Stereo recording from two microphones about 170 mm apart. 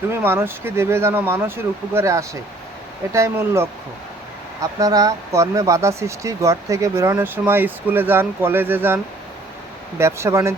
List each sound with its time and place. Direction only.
0.1 s speech: 15° right (ahead or behind)
10.0 s speech: 15° right (ahead or behind)